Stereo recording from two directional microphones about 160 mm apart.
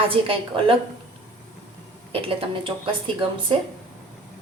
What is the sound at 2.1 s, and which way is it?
A woman's voice, 35° right (ahead or behind).